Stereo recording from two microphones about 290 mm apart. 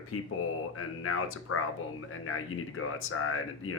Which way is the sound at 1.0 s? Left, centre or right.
Left.